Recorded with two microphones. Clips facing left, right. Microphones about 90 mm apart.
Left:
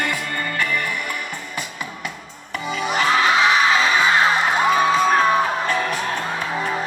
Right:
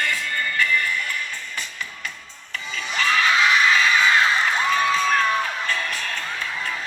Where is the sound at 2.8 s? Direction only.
45° left (ahead or behind).